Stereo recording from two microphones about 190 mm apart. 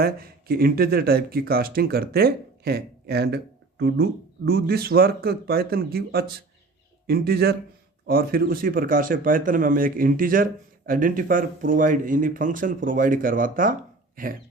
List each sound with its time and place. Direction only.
0.0 s speech: 50° right (ahead or behind)